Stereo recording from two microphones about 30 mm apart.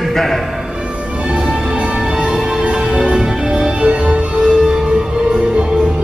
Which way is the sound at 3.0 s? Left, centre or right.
Right.